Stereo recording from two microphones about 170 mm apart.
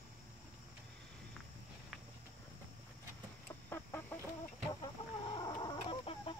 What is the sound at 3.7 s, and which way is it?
Chicken, 10° left (ahead or behind).